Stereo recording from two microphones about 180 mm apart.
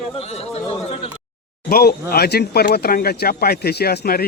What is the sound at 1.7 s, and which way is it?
Speech, 60° left (ahead or behind).